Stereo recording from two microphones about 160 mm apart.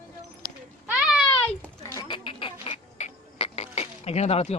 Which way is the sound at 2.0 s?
30° left (ahead or behind).